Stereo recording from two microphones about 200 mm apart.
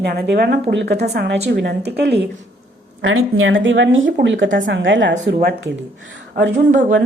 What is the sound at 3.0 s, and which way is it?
Speech, 85° right.